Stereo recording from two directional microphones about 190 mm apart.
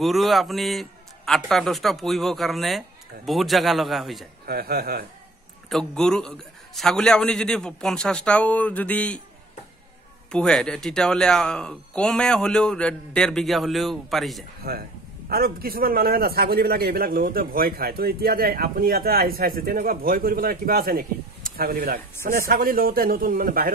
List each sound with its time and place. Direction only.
0.0 s speech: centre (ahead or behind)
4.5 s a man's voice: 55° right (ahead or behind)
5.7 s speech: 5° left (ahead or behind)
10.3 s speech: 5° left (ahead or behind)
14.6 s a man's voice: 50° right (ahead or behind)